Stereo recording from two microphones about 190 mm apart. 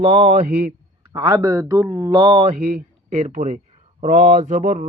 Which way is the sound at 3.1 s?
45° right (ahead or behind).